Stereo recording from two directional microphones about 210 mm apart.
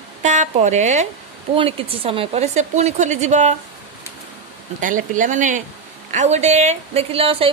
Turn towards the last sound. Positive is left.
turn(degrees=-25)  # may be behind; listen again after turning